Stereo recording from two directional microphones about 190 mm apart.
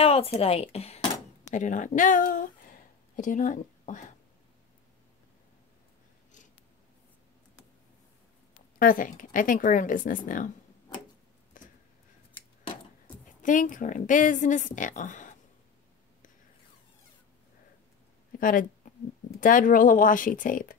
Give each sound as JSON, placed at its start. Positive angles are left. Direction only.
{"t": 0.0, "sound": "speech", "side_deg": 30}
{"t": 8.7, "sound": "a woman's voice", "side_deg": 45}
{"t": 11.6, "sound": "a sound", "side_deg": 45}
{"t": 13.4, "sound": "a woman's voice", "side_deg": 45}
{"t": 18.4, "sound": "a woman's voice", "side_deg": 45}